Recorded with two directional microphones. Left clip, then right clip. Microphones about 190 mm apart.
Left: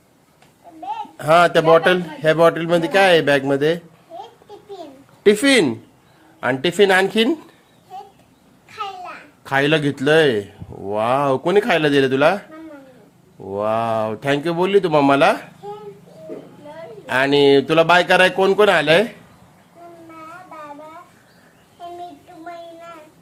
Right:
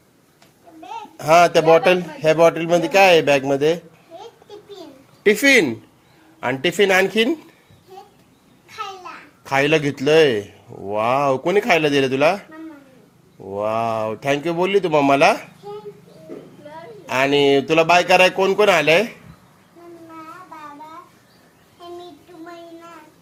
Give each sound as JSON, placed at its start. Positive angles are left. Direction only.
{"t": 1.1, "sound": "a man's voice", "side_deg": 10}
{"t": 5.2, "sound": "a man's voice", "side_deg": 15}
{"t": 9.4, "sound": "a man's voice", "side_deg": 15}
{"t": 17.1, "sound": "a man's voice", "side_deg": 15}